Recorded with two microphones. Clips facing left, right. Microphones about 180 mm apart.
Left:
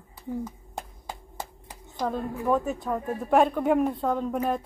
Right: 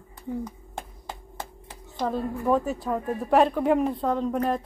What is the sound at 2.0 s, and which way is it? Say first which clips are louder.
A woman's voice: right 2 dB; centre (ahead or behind).